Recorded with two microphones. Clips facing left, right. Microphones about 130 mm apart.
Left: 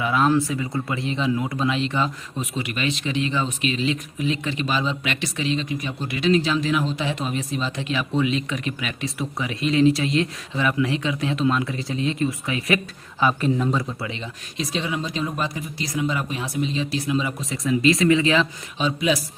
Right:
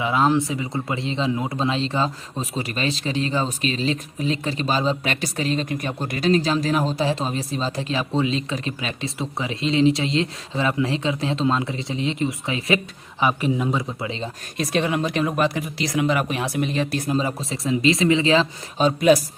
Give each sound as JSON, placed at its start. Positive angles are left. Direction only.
{"t": 0.0, "sound": "speech", "side_deg": -20}
{"t": 14.6, "sound": "speech", "side_deg": -60}
{"t": 17.1, "sound": "speech", "side_deg": -35}
{"t": 18.8, "sound": "speech", "side_deg": -45}